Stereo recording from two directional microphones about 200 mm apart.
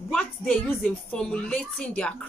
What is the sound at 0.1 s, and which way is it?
A woman's voice, 5° left (ahead or behind).